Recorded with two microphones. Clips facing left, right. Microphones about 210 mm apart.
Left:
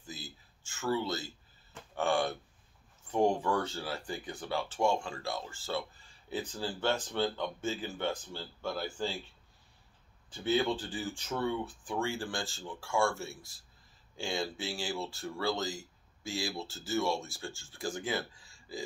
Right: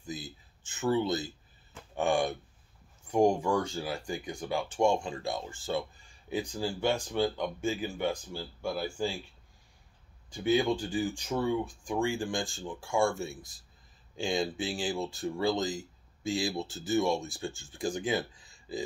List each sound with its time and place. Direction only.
0.0 s a sound: 15° right (ahead or behind)
2.0 s speech: 15° right (ahead or behind)
10.3 s speech: 15° right (ahead or behind)